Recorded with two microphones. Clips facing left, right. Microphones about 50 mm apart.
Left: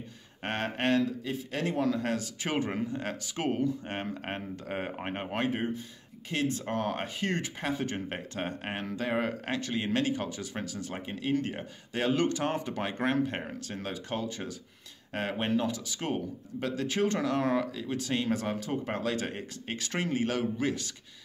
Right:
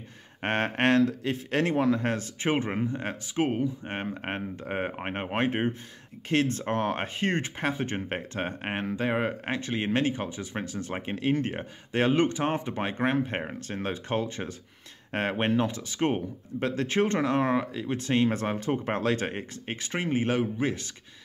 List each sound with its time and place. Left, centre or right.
0.4 s speech: right
6.2 s speech: right